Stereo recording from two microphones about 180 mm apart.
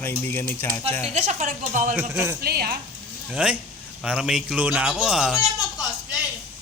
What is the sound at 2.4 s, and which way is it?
Speech, 60° right (ahead or behind).